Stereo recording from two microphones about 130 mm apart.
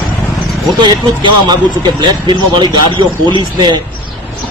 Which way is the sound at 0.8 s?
35° right (ahead or behind).